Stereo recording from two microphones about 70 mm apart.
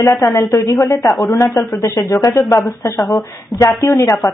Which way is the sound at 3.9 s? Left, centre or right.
Left.